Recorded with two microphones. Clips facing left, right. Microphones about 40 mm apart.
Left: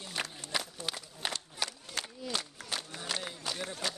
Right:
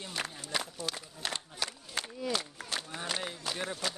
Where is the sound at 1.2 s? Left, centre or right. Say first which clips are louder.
Even; centre.